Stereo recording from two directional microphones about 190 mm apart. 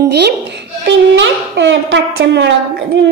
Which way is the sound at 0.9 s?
70° right (ahead or behind).